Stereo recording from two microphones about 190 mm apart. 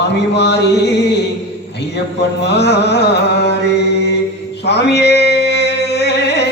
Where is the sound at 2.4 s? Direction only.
60° left (ahead or behind).